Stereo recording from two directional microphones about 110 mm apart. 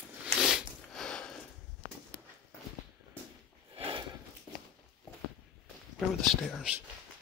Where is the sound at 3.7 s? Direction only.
55° right (ahead or behind).